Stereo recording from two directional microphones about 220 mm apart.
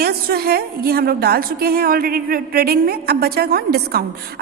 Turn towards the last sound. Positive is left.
turn(degrees=-45)  # may be behind; listen again after turning